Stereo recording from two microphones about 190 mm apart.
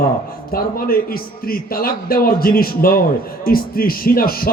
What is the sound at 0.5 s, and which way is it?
Speech, 50° left (ahead or behind).